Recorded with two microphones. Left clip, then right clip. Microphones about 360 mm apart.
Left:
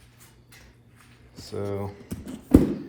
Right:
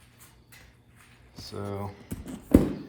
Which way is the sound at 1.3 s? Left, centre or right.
Right.